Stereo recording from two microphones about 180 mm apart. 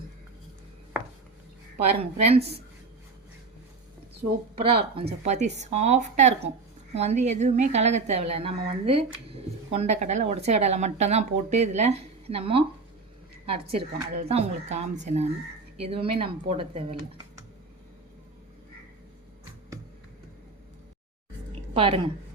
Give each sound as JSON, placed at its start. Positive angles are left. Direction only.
{"t": 2.0, "sound": "a woman's voice", "side_deg": -35}
{"t": 4.6, "sound": "a woman's voice", "side_deg": -30}
{"t": 21.7, "sound": "a woman's voice", "side_deg": -30}